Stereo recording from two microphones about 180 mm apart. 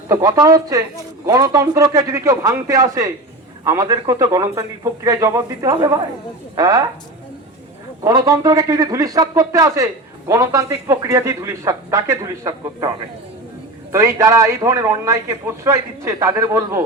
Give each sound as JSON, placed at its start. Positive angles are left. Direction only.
{"t": 0.1, "sound": "a man's voice", "side_deg": -20}
{"t": 8.0, "sound": "speech", "side_deg": -20}
{"t": 13.9, "sound": "speech", "side_deg": -15}